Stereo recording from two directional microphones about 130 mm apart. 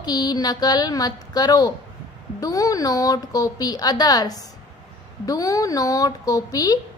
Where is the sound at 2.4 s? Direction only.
25° left (ahead or behind).